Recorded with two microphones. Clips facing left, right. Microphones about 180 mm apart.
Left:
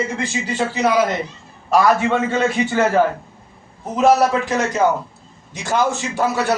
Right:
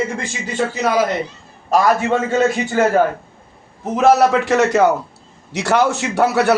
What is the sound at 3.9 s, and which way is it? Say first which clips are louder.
A man's voice: right 2 dB; 75° right (ahead or behind).